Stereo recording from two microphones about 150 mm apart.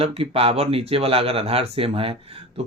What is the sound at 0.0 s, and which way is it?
Speech, 40° right (ahead or behind).